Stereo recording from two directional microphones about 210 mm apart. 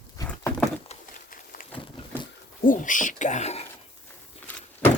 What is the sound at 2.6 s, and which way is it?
Speech, 40° left (ahead or behind).